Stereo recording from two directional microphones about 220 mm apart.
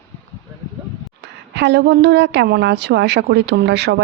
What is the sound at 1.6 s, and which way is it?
A woman's voice, 50° right (ahead or behind).